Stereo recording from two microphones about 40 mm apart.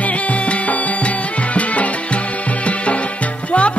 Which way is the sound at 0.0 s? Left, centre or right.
Left.